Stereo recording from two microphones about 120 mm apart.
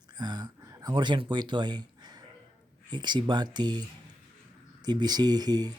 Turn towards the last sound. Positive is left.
turn(degrees=-35)  # may be behind; listen again after turning